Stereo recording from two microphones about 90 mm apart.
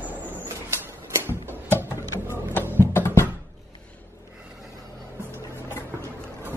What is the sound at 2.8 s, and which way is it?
Music, 25° left (ahead or behind).